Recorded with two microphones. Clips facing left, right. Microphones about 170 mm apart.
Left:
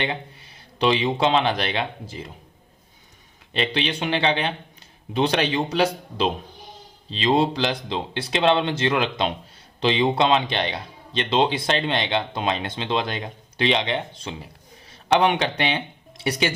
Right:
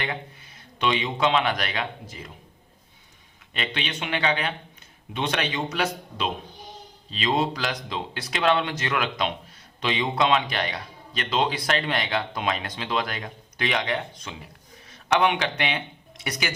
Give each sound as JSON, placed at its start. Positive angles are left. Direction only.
{"t": 0.0, "sound": "a man's voice", "side_deg": 30}
{"t": 3.5, "sound": "a man's voice", "side_deg": 30}